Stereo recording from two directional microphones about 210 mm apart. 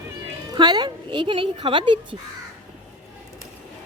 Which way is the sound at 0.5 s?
20° right (ahead or behind).